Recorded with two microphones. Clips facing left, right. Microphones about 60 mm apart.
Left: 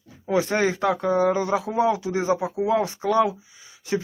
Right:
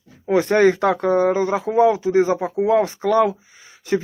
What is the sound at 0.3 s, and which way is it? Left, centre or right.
Speech, right.